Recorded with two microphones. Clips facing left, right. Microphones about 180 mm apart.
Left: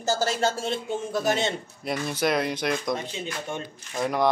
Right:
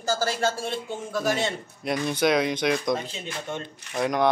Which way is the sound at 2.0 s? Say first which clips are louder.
Right 3 dB; centre (ahead or behind).